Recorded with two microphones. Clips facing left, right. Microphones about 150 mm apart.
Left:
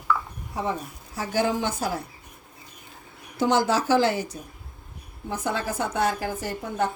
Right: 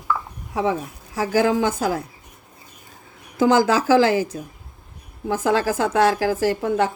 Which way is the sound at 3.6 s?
90° right.